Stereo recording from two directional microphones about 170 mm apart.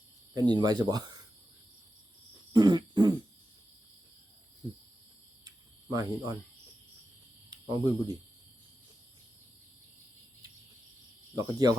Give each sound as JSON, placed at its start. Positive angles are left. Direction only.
{"t": 0.3, "sound": "speech", "side_deg": -25}
{"t": 2.5, "sound": "throat clearing", "side_deg": -25}
{"t": 5.5, "sound": "cricket", "side_deg": -20}
{"t": 7.5, "sound": "speech", "side_deg": -25}
{"t": 11.3, "sound": "speech", "side_deg": -20}